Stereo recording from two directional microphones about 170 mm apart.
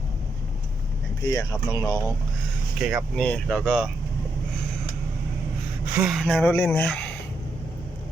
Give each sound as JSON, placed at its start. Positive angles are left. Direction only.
{"t": 1.2, "sound": "speech", "side_deg": 20}
{"t": 2.7, "sound": "speech", "side_deg": 0}
{"t": 5.9, "sound": "speech", "side_deg": -5}